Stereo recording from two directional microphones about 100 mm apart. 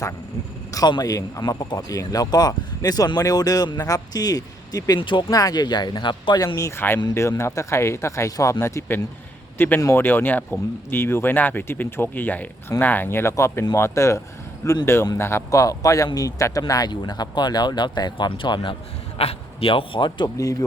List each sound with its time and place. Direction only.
0.7 s speech: 40° left (ahead or behind)
4.9 s speech: 55° left (ahead or behind)
5.3 s speech: 40° left (ahead or behind)
6.6 s speech: 25° left (ahead or behind)
9.6 s speech: 20° left (ahead or behind); by 16.9 s 35° left (ahead or behind)
16.9 s speech: 45° left (ahead or behind)